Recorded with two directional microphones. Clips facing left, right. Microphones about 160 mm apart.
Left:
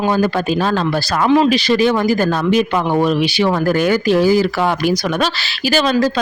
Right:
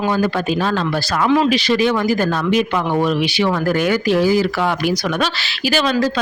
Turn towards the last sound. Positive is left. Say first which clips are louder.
# left 2 dB
turn(degrees=35)  # may be behind; listen again after turning